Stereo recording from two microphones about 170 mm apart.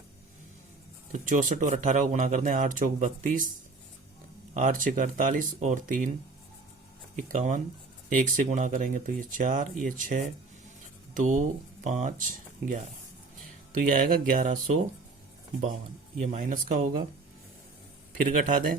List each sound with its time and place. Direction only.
1.1 s speech: 50° right (ahead or behind)
4.5 s speech: 50° right (ahead or behind)
7.2 s speech: 45° right (ahead or behind)
13.7 s speech: 50° right (ahead or behind)
16.2 s speech: 50° right (ahead or behind)
18.4 s speech: 50° right (ahead or behind)